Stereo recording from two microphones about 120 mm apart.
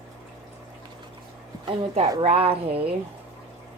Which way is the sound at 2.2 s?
50° right (ahead or behind).